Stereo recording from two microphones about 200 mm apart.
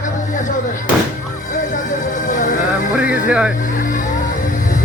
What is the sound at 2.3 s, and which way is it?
Music, 40° left (ahead or behind).